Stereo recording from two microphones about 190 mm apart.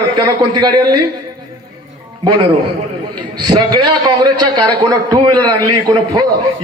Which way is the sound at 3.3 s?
20° right (ahead or behind).